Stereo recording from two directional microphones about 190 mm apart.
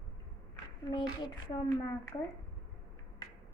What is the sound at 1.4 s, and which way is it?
Speech, 20° left (ahead or behind).